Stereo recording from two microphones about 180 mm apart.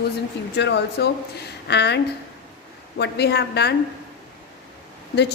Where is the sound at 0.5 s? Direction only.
70° left (ahead or behind).